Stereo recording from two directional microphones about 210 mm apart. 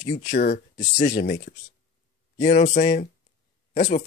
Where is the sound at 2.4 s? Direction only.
35° left (ahead or behind).